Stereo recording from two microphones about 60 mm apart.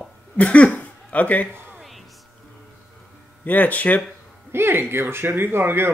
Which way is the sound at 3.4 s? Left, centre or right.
Left.